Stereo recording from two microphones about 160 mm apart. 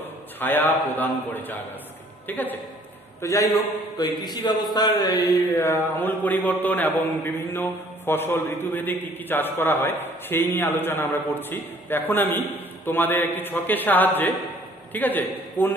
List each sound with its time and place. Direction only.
0.4 s mantra: 10° left (ahead or behind)
2.2 s a man's voice: 10° left (ahead or behind)
4.2 s a sound: 25° left (ahead or behind)
4.7 s mantra: 25° left (ahead or behind)
14.9 s a man's voice: 10° left (ahead or behind)
15.6 s mantra: 10° left (ahead or behind)